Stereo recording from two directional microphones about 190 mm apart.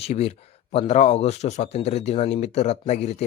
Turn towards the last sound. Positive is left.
turn(degrees=35)  # may be behind; listen again after turning